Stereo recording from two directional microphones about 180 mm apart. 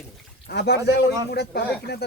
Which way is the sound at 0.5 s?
70° left (ahead or behind).